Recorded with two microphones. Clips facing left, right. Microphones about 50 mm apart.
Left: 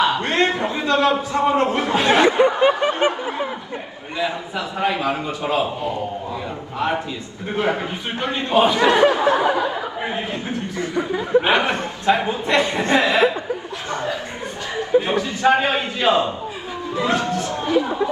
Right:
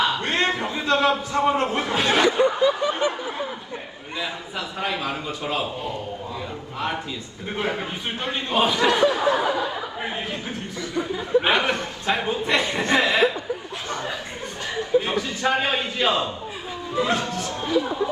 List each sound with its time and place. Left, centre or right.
0.0 s a man's voice: left
6.7 s a man's voice: left
10.8 s a man's voice: left
15.0 s a man's voice: left